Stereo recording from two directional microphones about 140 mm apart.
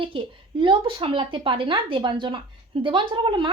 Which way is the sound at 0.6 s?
40° right (ahead or behind).